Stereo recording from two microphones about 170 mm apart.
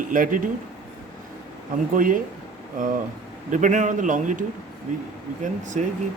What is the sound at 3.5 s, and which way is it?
Speech, 45° right (ahead or behind).